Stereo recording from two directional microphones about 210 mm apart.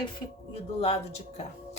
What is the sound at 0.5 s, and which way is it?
Speech, 30° left (ahead or behind).